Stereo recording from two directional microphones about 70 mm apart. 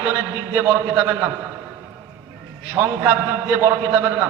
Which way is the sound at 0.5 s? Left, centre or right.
Right.